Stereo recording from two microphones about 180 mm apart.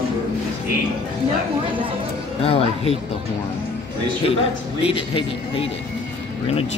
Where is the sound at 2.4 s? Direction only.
30° left (ahead or behind).